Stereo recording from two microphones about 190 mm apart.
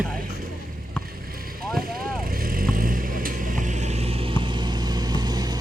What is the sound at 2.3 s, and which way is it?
Vehicle, 50° right (ahead or behind).